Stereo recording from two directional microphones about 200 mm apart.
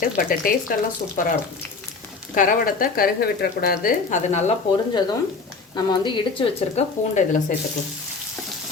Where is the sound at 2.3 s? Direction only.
40° left (ahead or behind).